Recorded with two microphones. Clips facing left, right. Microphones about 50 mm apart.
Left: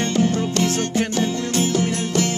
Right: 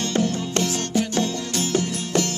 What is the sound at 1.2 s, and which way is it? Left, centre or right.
Music, left.